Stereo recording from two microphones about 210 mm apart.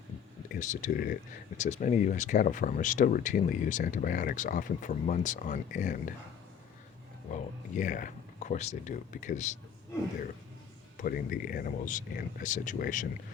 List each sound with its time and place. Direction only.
0.5 s speech: 35° left (ahead or behind)
7.3 s speech: 40° left (ahead or behind)
11.0 s speech: 45° left (ahead or behind)